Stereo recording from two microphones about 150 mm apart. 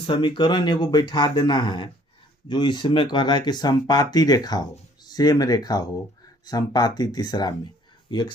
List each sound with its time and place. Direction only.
0.0 s speech: 35° left (ahead or behind)